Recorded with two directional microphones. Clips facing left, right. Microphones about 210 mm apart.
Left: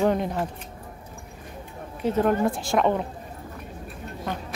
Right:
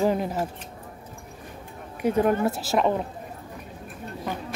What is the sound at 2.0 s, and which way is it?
Speech, 10° right (ahead or behind).